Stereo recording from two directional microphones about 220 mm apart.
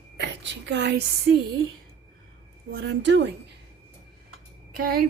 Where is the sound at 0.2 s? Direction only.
50° right (ahead or behind).